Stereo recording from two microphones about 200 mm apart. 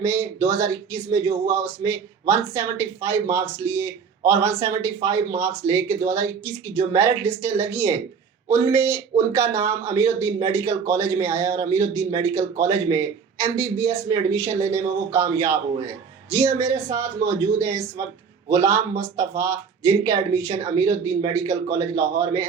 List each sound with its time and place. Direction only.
0.0 s speech: 15° right (ahead or behind)